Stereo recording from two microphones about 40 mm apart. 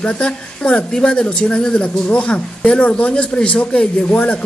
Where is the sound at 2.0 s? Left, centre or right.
Left.